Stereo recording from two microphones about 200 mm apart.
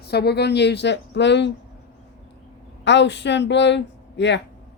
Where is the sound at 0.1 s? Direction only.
55° left (ahead or behind).